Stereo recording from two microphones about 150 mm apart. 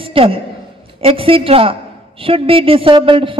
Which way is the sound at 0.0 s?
35° right (ahead or behind).